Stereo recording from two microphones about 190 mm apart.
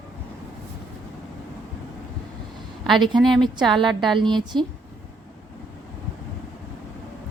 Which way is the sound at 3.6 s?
25° right (ahead or behind).